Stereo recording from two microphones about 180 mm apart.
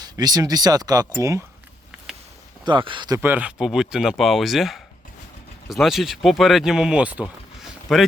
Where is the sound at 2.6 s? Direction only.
25° right (ahead or behind).